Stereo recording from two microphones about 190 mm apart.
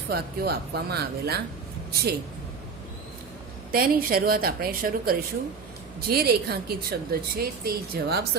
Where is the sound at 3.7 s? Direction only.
50° right (ahead or behind).